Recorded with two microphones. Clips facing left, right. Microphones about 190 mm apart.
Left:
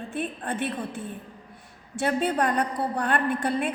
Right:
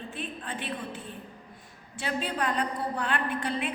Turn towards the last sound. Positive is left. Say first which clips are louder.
# left 5 dB
turn(degrees=45)  # may be behind; listen again after turning